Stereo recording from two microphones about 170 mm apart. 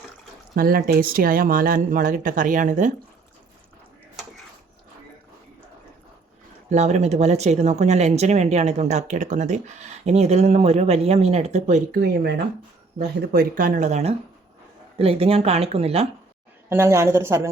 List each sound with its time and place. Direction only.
0.5 s speech: 60° right (ahead or behind)
6.7 s speech: 45° right (ahead or behind)
13.1 s speech: 65° right (ahead or behind); by 16.0 s 35° right (ahead or behind)
16.6 s a woman's voice: 15° right (ahead or behind)